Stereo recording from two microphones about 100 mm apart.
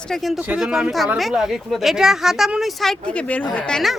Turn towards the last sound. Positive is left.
turn(degrees=5)  # may be behind; listen again after turning